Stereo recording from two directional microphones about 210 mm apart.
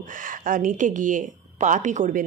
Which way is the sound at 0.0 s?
40° right (ahead or behind).